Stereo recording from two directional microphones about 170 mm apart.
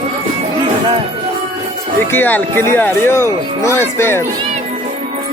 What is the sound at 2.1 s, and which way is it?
Speech, 10° left (ahead or behind).